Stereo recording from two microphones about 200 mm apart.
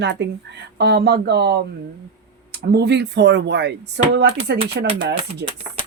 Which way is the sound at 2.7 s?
55° right (ahead or behind).